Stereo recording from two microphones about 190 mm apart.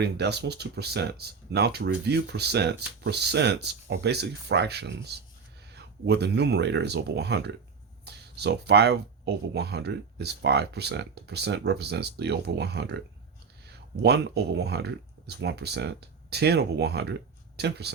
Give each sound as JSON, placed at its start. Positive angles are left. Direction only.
{"t": 0.0, "sound": "speech", "side_deg": -60}